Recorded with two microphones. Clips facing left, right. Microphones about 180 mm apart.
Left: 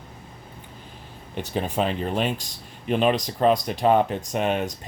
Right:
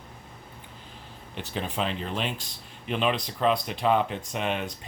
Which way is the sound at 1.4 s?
45° left (ahead or behind).